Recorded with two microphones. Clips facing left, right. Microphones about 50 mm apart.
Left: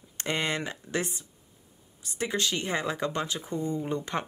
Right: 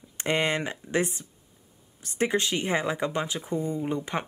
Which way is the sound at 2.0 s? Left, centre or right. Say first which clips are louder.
Right 6 dB; right.